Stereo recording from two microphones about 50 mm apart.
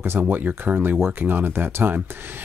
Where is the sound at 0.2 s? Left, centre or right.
Right.